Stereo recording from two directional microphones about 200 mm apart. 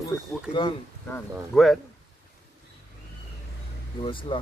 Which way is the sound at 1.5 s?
Centre (ahead or behind).